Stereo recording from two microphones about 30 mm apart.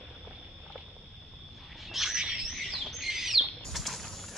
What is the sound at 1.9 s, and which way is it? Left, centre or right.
Wild animals, centre.